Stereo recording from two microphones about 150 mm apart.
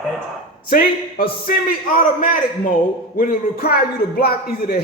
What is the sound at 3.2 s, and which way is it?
A man's voice, 80° left.